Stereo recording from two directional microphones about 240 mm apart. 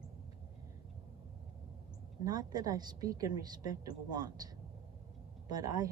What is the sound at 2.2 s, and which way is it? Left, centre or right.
Speech, centre.